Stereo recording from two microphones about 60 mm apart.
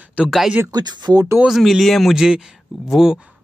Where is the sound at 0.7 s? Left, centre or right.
Right.